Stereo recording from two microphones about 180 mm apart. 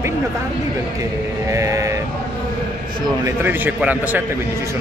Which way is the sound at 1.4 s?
15° right (ahead or behind).